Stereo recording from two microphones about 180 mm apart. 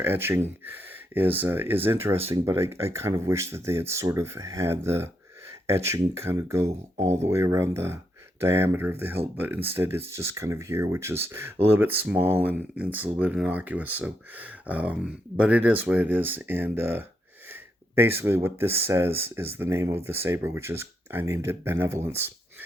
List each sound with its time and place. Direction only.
0.0 s speech: 10° right (ahead or behind)
6.9 s speech: 35° right (ahead or behind)
7.2 s speech: 15° right (ahead or behind)